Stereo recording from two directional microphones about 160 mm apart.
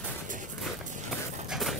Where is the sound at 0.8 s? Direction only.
50° right (ahead or behind).